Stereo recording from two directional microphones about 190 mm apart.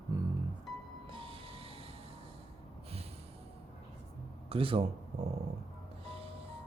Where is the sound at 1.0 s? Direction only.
25° right (ahead or behind).